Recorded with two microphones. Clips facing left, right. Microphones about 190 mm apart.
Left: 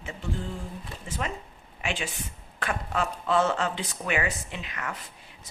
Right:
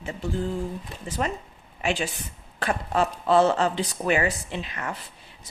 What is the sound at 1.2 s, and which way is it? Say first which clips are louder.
Speech: right 6 dB; 40° right (ahead or behind).